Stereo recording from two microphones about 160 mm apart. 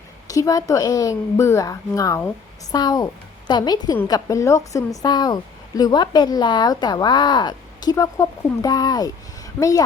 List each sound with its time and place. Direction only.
0.3 s a woman's voice: 20° left (ahead or behind)